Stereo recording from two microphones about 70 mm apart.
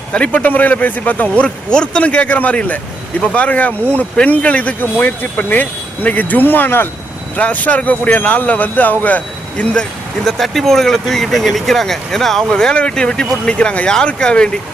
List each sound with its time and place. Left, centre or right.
0.1 s speech: centre
10.2 s speech: centre